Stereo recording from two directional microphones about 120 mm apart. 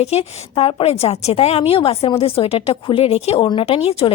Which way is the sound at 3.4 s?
45° left (ahead or behind).